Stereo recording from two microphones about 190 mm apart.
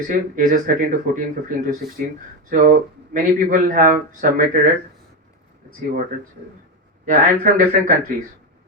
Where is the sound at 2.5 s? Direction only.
45° right (ahead or behind).